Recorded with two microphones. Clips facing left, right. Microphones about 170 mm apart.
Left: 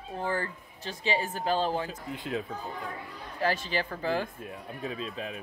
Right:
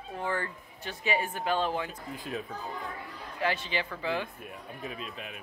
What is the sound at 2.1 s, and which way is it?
Speech, 20° left (ahead or behind).